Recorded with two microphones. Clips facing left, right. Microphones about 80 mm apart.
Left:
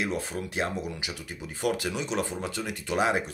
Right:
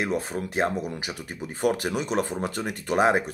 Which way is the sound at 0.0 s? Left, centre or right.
Right.